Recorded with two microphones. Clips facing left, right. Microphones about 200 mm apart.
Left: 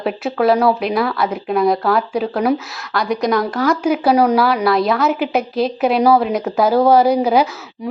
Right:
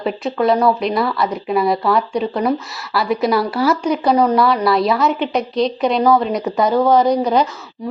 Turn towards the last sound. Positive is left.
turn(degrees=10)  # may be behind; listen again after turning